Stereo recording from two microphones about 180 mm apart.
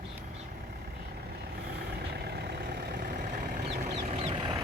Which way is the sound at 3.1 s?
65° right (ahead or behind).